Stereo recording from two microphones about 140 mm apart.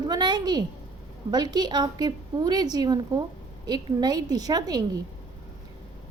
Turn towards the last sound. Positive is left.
turn(degrees=-25)  # may be behind; listen again after turning